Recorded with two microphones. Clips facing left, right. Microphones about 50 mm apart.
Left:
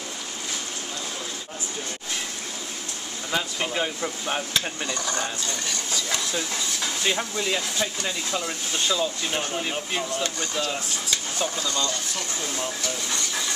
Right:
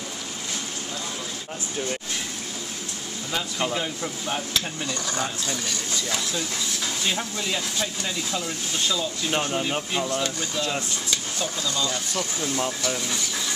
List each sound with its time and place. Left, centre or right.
3.3 s speech: centre
4.6 s speech: centre
7.0 s speech: centre
9.3 s speech: centre
9.6 s speech: centre